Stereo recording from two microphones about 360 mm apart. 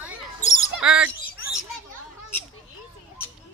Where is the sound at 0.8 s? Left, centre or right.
Centre.